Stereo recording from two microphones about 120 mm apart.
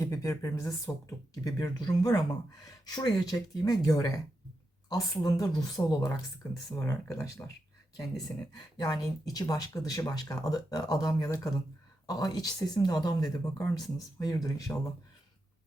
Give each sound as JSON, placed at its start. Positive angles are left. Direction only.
{"t": 0.0, "sound": "speech", "side_deg": 25}
{"t": 5.2, "sound": "speech", "side_deg": 30}